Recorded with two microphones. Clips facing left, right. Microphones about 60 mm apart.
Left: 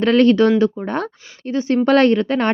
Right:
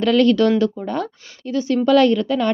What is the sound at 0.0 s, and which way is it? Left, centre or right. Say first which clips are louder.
A woman's voice: left 2 dB; left.